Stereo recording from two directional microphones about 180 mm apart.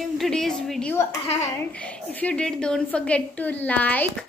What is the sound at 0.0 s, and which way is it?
Speech, centre (ahead or behind).